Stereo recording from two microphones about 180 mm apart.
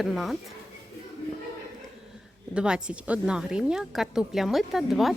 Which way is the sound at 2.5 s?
5° right (ahead or behind).